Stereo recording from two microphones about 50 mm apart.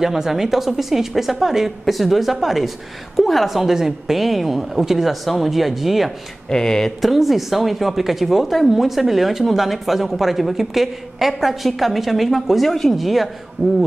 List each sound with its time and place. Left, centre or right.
0.0 s speech: centre
6.5 s speech: centre
7.0 s speech: centre
13.6 s speech: right